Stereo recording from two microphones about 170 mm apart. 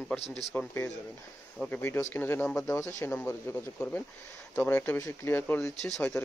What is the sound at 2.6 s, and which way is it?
Speech, 20° left (ahead or behind).